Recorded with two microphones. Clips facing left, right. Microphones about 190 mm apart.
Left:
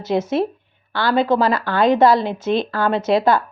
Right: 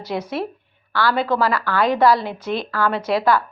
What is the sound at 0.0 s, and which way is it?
A woman's voice, 25° left (ahead or behind).